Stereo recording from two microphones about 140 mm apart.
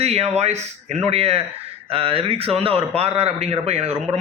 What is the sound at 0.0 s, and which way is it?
A man's voice, 45° right (ahead or behind).